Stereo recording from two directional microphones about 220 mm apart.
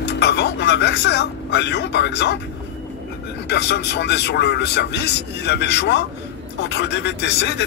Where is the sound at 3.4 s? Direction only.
50° left (ahead or behind).